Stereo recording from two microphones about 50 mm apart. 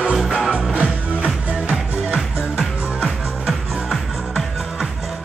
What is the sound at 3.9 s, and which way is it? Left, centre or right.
Music, centre.